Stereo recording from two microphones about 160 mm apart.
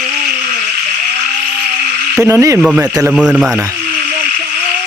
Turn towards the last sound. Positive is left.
turn(degrees=-5)  # may be behind; listen again after turning